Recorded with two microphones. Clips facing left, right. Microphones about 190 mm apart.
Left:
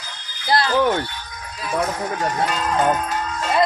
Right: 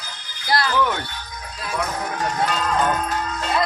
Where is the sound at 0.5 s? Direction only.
25° left (ahead or behind).